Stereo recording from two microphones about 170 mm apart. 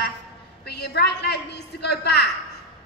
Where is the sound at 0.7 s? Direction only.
75° left (ahead or behind).